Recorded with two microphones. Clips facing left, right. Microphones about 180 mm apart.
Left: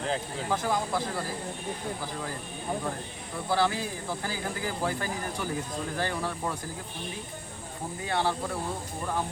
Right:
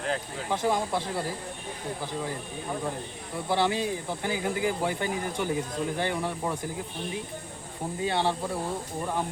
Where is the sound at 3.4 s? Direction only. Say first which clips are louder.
Right 1 dB; 20° right (ahead or behind).